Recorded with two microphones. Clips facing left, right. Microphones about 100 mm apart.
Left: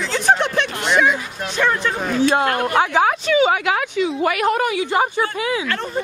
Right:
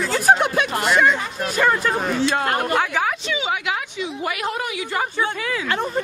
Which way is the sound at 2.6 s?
20° left (ahead or behind).